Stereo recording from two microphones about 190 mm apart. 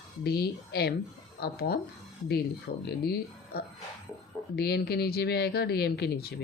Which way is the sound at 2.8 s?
55° left (ahead or behind).